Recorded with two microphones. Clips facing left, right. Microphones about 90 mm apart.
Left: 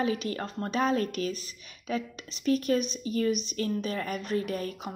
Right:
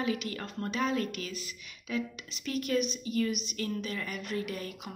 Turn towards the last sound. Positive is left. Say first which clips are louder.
# left 5 dB
turn(degrees=40)  # may be behind; listen again after turning